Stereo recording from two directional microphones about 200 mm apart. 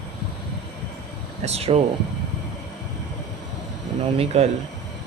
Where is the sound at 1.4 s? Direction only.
30° right (ahead or behind).